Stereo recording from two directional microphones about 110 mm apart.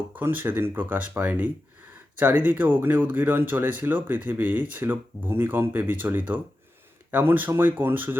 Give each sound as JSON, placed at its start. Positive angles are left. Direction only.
{"t": 0.1, "sound": "speech", "side_deg": -15}